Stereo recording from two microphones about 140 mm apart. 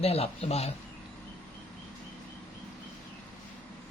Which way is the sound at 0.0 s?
45° left (ahead or behind).